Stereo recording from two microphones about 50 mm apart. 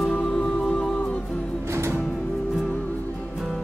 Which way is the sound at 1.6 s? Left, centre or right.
Right.